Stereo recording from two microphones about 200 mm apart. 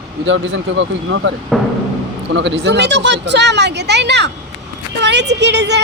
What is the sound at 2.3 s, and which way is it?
Speech, 60° right (ahead or behind).